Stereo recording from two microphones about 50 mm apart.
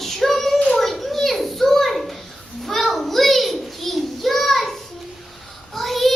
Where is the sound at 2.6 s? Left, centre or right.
Centre.